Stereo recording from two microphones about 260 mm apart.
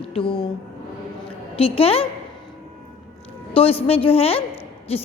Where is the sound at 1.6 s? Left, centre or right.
Left.